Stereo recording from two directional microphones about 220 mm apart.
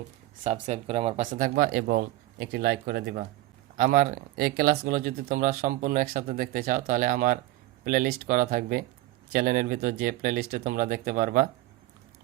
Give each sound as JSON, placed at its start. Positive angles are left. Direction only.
{"t": 0.4, "sound": "speech", "side_deg": -30}